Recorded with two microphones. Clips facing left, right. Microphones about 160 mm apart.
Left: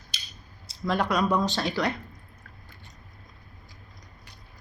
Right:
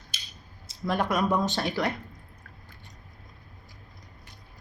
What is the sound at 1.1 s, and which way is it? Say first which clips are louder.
Speech: left 1 dB; 20° right (ahead or behind).